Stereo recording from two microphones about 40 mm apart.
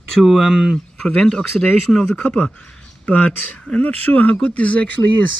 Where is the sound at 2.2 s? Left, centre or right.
Left.